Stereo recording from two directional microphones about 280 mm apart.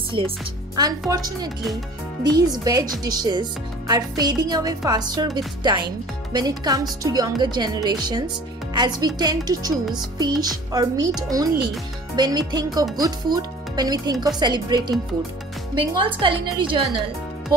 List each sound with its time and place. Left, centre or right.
0.2 s speech: centre
12.2 s speech: centre